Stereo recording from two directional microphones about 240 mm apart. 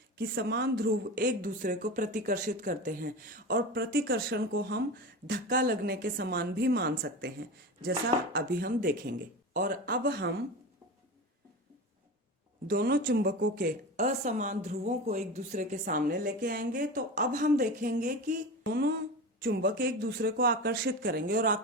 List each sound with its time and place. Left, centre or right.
0.2 s speech: right
12.6 s speech: right